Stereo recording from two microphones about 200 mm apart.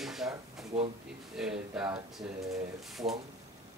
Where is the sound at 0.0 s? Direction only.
Centre (ahead or behind).